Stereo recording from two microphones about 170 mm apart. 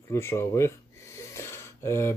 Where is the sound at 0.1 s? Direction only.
15° left (ahead or behind).